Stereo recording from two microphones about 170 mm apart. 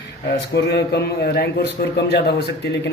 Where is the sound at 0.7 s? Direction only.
70° left (ahead or behind).